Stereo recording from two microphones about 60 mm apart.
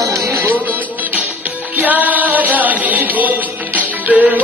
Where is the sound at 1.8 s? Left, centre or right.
Right.